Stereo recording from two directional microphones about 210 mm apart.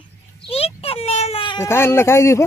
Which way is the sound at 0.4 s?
25° left (ahead or behind).